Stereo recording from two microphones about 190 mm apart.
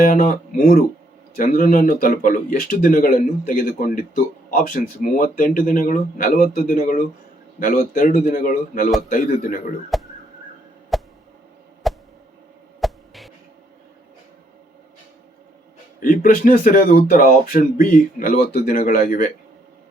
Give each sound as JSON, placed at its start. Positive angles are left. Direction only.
{"t": 0.0, "sound": "speech", "side_deg": 50}
{"t": 9.9, "sound": "a sound", "side_deg": 0}
{"t": 16.0, "sound": "speech", "side_deg": 45}